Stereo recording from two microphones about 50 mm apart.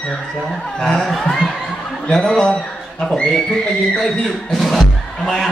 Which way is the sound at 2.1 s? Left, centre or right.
Centre.